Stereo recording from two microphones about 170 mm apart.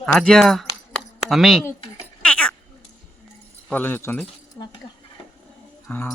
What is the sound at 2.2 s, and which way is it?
Goat, 5° left (ahead or behind).